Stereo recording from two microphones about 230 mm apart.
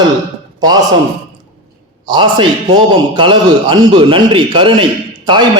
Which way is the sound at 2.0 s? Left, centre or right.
Centre.